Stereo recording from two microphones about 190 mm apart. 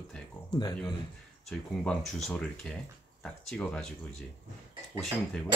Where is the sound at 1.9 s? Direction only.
Centre (ahead or behind).